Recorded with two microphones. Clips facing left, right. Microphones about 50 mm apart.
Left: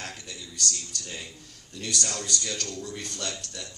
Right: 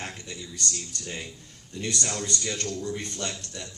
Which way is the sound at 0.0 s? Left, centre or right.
Right.